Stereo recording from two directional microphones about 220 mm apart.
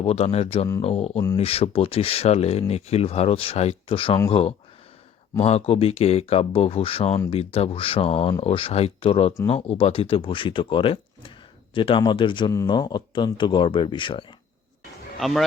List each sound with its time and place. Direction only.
0.0 s speech: 30° left (ahead or behind)
15.2 s a man's voice: centre (ahead or behind)